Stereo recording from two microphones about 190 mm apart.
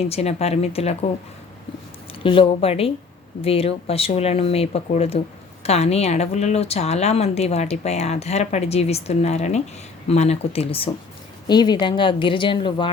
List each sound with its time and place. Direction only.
0.0 s speech: 35° left (ahead or behind)
2.2 s speech: 30° left (ahead or behind)